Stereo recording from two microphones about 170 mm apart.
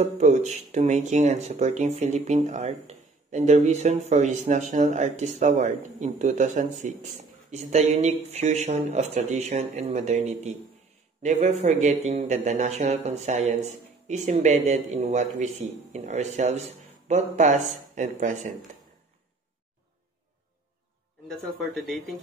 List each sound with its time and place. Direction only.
0.0 s speech: 40° right (ahead or behind)
21.3 s speech: centre (ahead or behind)